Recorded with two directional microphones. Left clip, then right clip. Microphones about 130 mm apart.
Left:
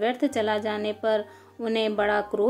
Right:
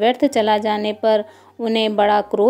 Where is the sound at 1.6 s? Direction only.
30° right (ahead or behind).